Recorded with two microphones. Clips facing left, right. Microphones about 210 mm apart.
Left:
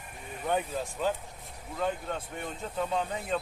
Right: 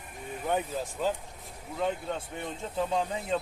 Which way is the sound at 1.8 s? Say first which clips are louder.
Right 1 dB; 20° right (ahead or behind).